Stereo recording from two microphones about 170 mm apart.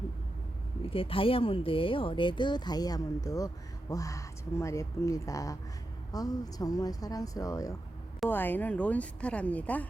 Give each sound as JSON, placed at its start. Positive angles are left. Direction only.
{"t": 0.9, "sound": "speech", "side_deg": 30}